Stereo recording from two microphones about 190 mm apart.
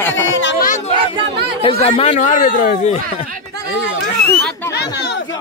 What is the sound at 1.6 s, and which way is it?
Speech, 30° left (ahead or behind).